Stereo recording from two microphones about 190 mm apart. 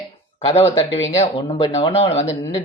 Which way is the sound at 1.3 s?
30° left (ahead or behind).